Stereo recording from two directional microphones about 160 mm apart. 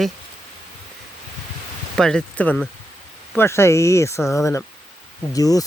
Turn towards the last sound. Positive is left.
turn(degrees=20)  # may be behind; listen again after turning